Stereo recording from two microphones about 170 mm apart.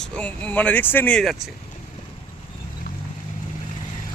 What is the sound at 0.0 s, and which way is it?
Speech, 5° left (ahead or behind).